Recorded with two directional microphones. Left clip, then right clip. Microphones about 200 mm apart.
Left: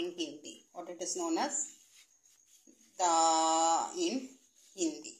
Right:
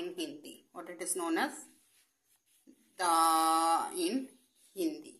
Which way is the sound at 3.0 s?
20° right (ahead or behind).